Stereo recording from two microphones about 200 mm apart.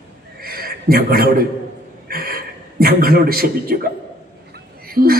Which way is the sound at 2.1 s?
50° right (ahead or behind).